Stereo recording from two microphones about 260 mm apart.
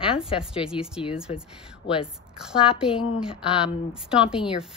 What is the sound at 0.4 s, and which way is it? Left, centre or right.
A woman's voice, centre.